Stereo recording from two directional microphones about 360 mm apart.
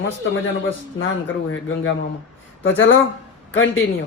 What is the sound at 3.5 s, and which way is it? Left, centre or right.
Speech, left.